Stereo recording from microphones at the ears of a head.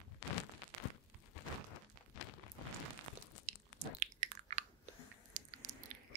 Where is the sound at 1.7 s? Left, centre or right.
Left.